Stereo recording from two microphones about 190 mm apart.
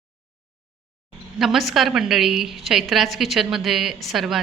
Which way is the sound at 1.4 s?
Centre (ahead or behind).